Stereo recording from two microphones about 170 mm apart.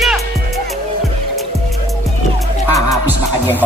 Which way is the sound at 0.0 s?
Centre (ahead or behind).